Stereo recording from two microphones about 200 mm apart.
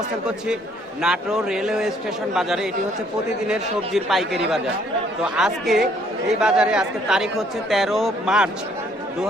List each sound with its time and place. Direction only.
1.0 s speech: 5° right (ahead or behind)